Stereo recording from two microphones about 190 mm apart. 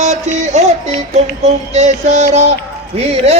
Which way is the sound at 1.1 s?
35° right (ahead or behind).